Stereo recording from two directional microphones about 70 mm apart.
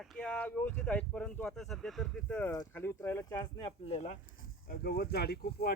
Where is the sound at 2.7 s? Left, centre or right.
Left.